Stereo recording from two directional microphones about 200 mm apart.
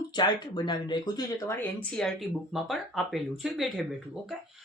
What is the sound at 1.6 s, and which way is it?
Speech, 5° left (ahead or behind).